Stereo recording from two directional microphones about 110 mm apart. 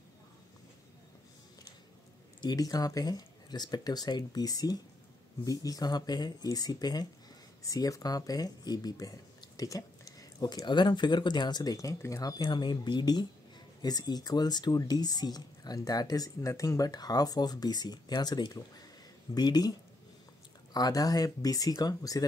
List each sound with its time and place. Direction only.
2.4 s speech: 35° left (ahead or behind)
20.7 s speech: 35° left (ahead or behind)